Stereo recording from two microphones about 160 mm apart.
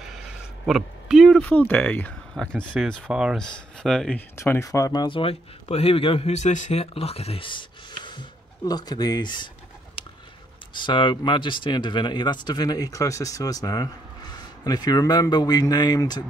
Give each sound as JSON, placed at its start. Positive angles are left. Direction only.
{"t": 0.7, "sound": "speech", "side_deg": 0}
{"t": 4.4, "sound": "speech", "side_deg": 15}
{"t": 10.7, "sound": "speech", "side_deg": 30}